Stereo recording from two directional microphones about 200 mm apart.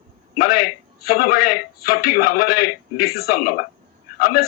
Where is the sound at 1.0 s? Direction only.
50° left (ahead or behind).